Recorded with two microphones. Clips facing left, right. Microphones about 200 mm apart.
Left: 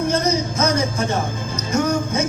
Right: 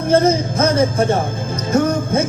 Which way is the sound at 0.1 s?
55° right (ahead or behind).